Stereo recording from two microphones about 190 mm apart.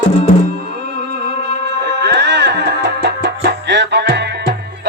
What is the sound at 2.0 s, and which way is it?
Music, 65° right (ahead or behind).